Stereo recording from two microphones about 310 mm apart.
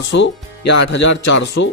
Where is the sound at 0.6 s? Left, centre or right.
Left.